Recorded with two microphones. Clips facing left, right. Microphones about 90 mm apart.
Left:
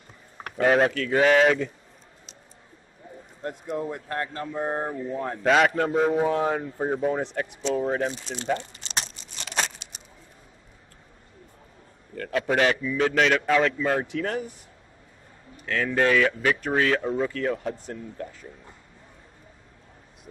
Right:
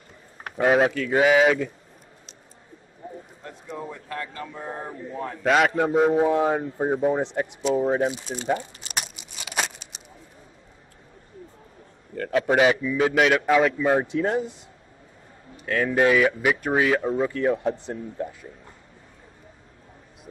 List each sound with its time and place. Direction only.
0.7 s speech: 5° right (ahead or behind)
3.4 s speech: 50° left (ahead or behind)
5.4 s speech: centre (ahead or behind)
6.1 s speech: 20° right (ahead or behind)
7.6 s crumpling: 10° right (ahead or behind)
12.2 s speech: 10° right (ahead or behind)
15.6 s speech: 10° right (ahead or behind)